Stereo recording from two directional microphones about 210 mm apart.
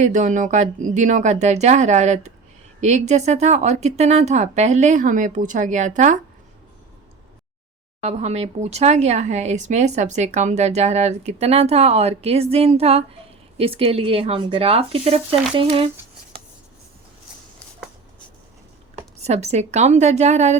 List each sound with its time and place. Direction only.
0.0 s speech: 35° right (ahead or behind)
8.0 s speech: 30° right (ahead or behind)
19.2 s speech: 30° right (ahead or behind)